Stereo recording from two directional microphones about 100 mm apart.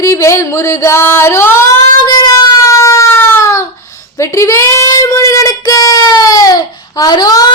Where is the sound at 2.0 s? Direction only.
40° left (ahead or behind).